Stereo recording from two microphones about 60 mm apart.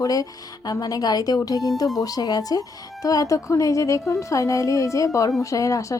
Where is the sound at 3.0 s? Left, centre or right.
Left.